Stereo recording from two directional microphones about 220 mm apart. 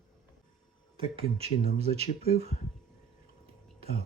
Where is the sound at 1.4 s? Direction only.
25° right (ahead or behind).